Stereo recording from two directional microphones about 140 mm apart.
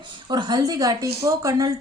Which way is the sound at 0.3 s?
30° right (ahead or behind).